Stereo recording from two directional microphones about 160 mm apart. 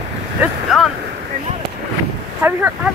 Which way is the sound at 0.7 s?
Centre (ahead or behind).